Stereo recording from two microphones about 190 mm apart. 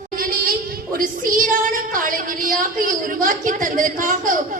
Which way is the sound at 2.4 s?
45° right (ahead or behind).